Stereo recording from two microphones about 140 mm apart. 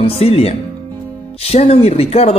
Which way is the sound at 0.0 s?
45° left (ahead or behind).